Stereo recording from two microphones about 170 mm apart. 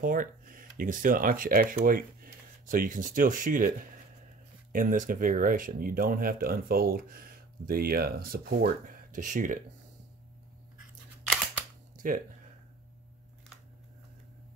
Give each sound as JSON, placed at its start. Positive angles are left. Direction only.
{"t": 0.0, "sound": "speech", "side_deg": -55}
{"t": 4.7, "sound": "speech", "side_deg": -55}
{"t": 12.0, "sound": "speech", "side_deg": -50}